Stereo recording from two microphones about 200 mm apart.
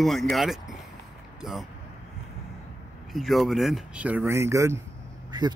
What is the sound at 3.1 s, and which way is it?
Speech, centre (ahead or behind).